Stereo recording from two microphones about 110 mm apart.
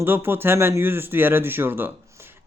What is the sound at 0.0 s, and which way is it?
Speech, 20° right (ahead or behind).